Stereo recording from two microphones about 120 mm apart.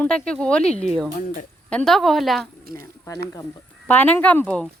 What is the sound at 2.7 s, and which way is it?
Speech, 25° left (ahead or behind).